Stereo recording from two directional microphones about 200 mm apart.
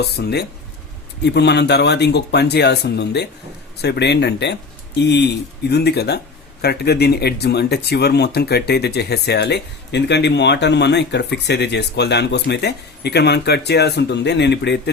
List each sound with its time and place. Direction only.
0.2 s speech: 55° left (ahead or behind)